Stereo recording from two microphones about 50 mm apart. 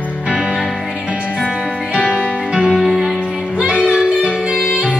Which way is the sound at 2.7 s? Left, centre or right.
Centre.